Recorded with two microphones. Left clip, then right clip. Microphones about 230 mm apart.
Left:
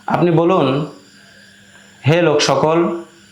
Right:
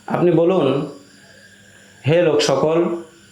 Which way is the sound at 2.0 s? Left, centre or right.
Left.